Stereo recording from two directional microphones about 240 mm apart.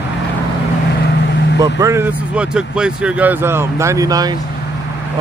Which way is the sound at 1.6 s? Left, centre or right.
Centre.